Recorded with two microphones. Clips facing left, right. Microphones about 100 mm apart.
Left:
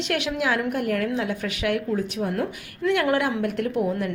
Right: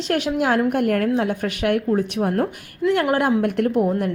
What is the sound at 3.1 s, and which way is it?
Speech, 40° right (ahead or behind).